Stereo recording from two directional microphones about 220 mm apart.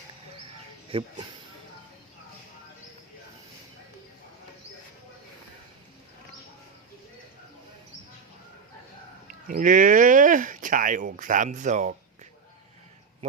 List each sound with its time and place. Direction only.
0.9 s speech: 25° right (ahead or behind)
9.2 s speech: 35° right (ahead or behind)